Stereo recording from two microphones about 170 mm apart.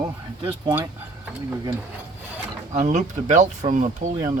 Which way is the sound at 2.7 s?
45° right (ahead or behind).